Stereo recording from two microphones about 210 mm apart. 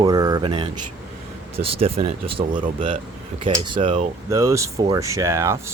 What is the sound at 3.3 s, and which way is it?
Speech, 25° right (ahead or behind).